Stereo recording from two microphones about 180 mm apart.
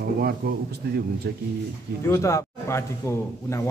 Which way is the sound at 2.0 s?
15° left (ahead or behind).